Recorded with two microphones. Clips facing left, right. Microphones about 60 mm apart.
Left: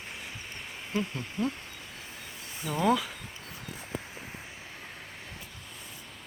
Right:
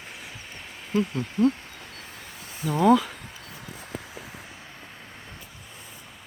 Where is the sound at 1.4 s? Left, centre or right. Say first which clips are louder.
Right 10 dB; right.